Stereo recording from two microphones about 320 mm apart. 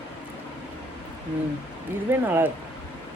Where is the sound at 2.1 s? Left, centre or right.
Centre.